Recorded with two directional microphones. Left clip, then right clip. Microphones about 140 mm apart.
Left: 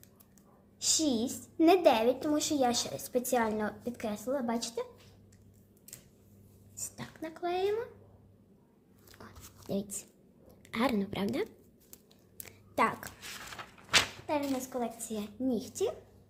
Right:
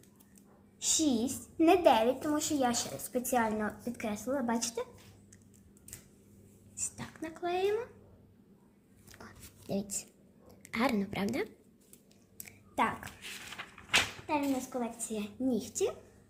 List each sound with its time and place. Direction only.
0.8 s a woman's voice: 20° left (ahead or behind)
1.5 s a woman's voice: 35° left (ahead or behind)
2.2 s a woman's voice: 55° left (ahead or behind); by 3.8 s 35° left (ahead or behind)
3.9 s a woman's voice: 15° left (ahead or behind)
6.9 s a child's voice: 25° left (ahead or behind)
9.6 s a woman's voice: 40° left (ahead or behind)
12.7 s speech: 40° left (ahead or behind)